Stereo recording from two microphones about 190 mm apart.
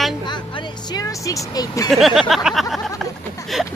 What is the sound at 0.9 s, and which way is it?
Speech, 20° left (ahead or behind).